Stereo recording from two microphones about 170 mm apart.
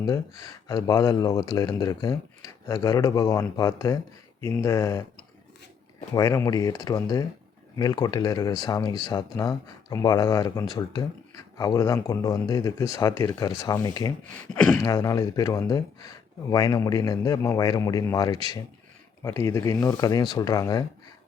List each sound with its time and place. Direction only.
0.0 s speech: 20° left (ahead or behind)
6.1 s speech: 20° left (ahead or behind)
14.5 s speech: 5° left (ahead or behind)
14.8 s speech: 20° left (ahead or behind)